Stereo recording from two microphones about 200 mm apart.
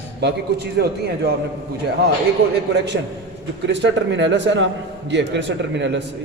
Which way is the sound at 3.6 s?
65° right (ahead or behind).